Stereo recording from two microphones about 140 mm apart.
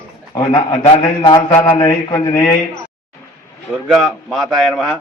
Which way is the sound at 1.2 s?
30° left (ahead or behind).